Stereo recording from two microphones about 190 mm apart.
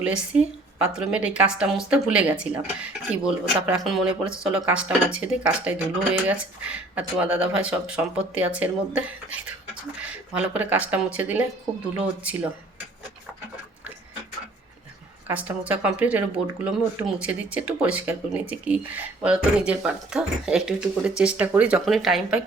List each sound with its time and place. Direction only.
0.0 s speech: 5° right (ahead or behind)
15.3 s speech: 10° right (ahead or behind)